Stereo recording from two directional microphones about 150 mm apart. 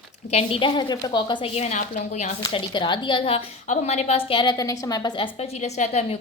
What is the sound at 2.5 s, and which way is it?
Speech, 30° left (ahead or behind).